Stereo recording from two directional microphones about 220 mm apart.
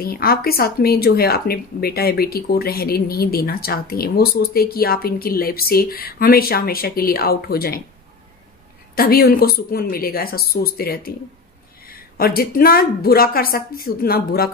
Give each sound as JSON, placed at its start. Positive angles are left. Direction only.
{"t": 0.0, "sound": "speech", "side_deg": 45}
{"t": 8.9, "sound": "speech", "side_deg": 45}